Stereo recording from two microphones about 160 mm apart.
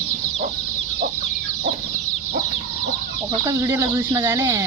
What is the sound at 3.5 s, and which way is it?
Speech, 20° right (ahead or behind).